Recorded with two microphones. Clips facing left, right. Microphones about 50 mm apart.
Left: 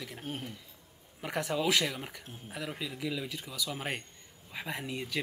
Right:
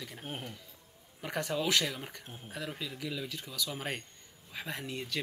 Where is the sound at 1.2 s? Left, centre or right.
Centre.